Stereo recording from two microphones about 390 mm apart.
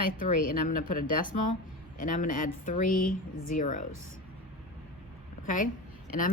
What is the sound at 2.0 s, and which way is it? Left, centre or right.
Speech, centre.